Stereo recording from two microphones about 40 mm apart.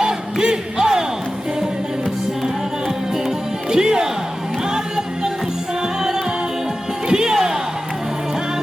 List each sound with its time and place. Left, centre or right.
0.0 s crowd: centre
3.7 s music: centre